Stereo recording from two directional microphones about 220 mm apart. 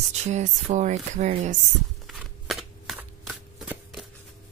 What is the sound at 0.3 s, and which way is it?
Speech, 30° right (ahead or behind).